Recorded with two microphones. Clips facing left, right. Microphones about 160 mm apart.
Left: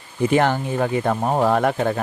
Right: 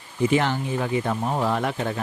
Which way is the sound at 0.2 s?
50° left (ahead or behind).